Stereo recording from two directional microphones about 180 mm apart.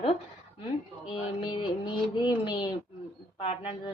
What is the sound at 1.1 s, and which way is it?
A woman's voice, 30° left (ahead or behind).